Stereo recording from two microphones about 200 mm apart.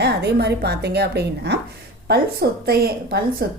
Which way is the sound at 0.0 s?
55° right (ahead or behind).